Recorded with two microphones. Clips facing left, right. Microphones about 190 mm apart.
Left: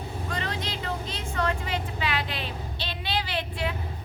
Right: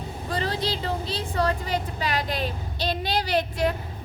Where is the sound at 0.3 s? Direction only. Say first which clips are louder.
Right 7 dB; 35° right (ahead or behind).